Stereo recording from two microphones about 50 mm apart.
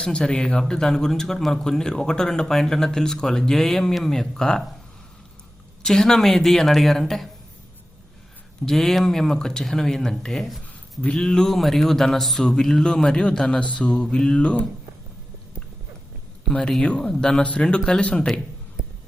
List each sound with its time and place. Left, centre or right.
0.0 s a man's voice: centre
5.8 s speech: centre
8.6 s a man's voice: centre
11.0 s a man's voice: centre
16.5 s a man's voice: centre
18.8 s a sound: right